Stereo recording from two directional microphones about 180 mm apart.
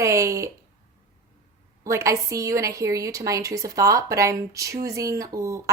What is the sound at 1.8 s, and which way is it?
A woman's voice, 15° right (ahead or behind).